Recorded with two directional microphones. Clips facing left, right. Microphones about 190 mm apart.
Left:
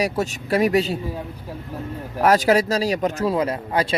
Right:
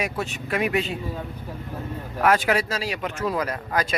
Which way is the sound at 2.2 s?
40° left (ahead or behind).